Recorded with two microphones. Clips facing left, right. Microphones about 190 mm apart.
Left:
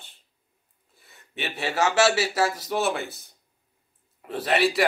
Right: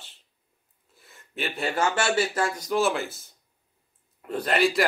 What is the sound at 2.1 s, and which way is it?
A man's voice, 5° left (ahead or behind).